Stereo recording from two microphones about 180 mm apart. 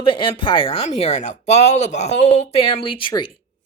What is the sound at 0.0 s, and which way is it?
Speech, 25° left (ahead or behind).